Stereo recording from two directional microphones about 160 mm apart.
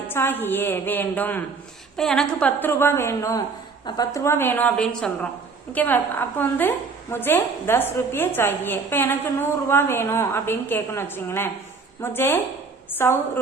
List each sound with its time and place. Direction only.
0.1 s a woman's voice: 15° left (ahead or behind)